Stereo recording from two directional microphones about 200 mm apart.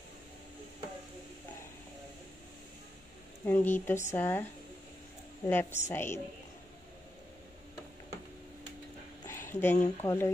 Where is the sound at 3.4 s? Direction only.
10° left (ahead or behind).